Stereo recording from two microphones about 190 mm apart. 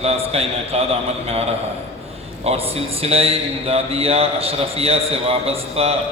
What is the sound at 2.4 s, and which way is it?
A man's voice, 30° right (ahead or behind).